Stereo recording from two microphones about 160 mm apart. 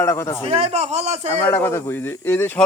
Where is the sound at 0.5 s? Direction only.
40° right (ahead or behind).